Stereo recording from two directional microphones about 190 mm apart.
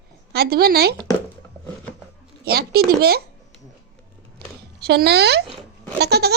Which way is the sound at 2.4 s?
55° right (ahead or behind).